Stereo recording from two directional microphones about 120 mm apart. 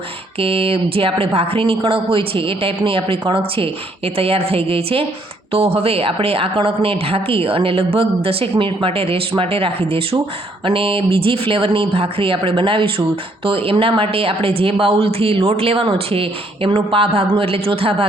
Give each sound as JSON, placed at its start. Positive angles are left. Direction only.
{"t": 0.3, "sound": "speech", "side_deg": -50}